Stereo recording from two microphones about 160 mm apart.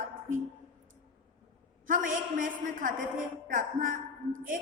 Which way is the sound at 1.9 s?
55° right (ahead or behind).